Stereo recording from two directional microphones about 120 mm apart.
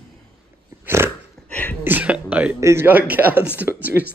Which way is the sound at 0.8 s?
20° right (ahead or behind).